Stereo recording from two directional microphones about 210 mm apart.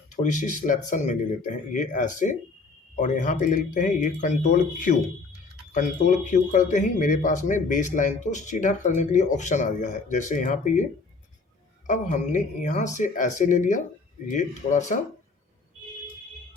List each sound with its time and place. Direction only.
0.2 s speech: 35° left (ahead or behind)
11.9 s speech: 35° left (ahead or behind)